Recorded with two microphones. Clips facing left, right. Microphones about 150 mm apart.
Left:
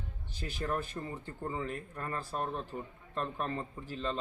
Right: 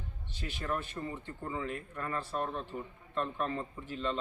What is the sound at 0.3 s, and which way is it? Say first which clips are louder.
A man's voice: left 1 dB; 40° left (ahead or behind).